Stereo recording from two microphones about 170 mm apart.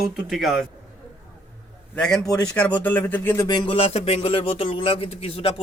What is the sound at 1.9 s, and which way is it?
Speech, 5° left (ahead or behind).